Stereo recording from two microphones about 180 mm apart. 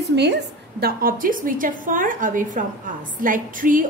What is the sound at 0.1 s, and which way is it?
A woman's voice, 70° right (ahead or behind).